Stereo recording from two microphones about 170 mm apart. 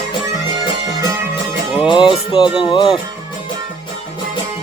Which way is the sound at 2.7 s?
30° left (ahead or behind).